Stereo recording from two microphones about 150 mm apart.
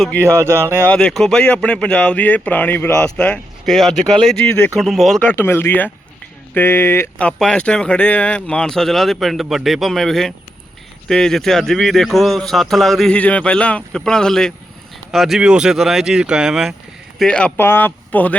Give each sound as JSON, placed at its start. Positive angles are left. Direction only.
{"t": 0.2, "sound": "speech", "side_deg": -20}
{"t": 0.9, "sound": "speech", "side_deg": 5}
{"t": 5.2, "sound": "speech", "side_deg": 10}